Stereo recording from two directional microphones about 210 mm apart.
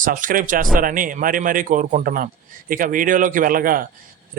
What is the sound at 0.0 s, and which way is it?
Speech, 40° right (ahead or behind).